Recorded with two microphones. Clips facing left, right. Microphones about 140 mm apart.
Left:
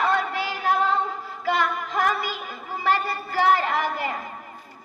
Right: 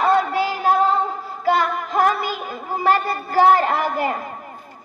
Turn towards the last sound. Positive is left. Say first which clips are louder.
# right 5 dB
turn(degrees=-45)  # may be behind; listen again after turning